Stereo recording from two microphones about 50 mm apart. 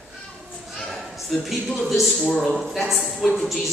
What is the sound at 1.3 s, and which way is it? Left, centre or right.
A woman's voice, centre.